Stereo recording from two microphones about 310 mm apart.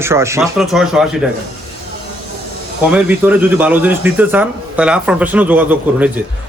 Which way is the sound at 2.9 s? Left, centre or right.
Centre.